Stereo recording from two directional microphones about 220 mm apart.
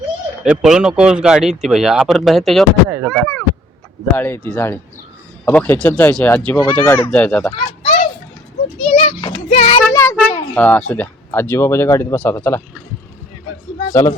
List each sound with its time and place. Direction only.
0.4 s speech: 5° right (ahead or behind)
7.5 s a sound: 30° left (ahead or behind)
9.5 s a child's voice: 25° left (ahead or behind)
9.9 s speech: 15° left (ahead or behind)
13.8 s speech: 15° left (ahead or behind)